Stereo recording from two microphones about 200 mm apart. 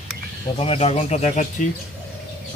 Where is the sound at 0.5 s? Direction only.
30° left (ahead or behind).